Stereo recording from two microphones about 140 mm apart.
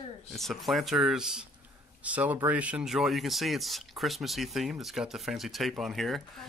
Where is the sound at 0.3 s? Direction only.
Centre (ahead or behind).